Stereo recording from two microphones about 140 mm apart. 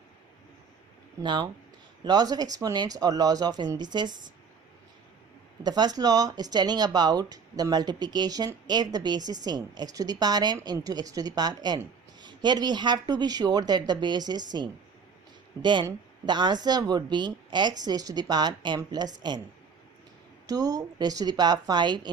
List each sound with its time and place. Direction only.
1.2 s speech: 35° right (ahead or behind)
5.6 s speech: 30° right (ahead or behind)
20.5 s speech: 25° right (ahead or behind)